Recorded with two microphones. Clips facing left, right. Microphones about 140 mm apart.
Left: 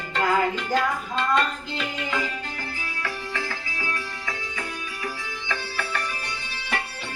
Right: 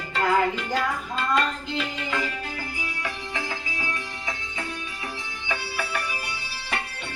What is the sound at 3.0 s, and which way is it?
Music, 20° right (ahead or behind).